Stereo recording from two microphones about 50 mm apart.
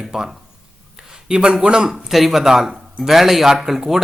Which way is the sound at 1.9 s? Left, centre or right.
Centre.